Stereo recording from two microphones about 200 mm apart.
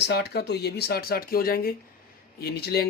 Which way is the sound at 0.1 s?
55° left (ahead or behind).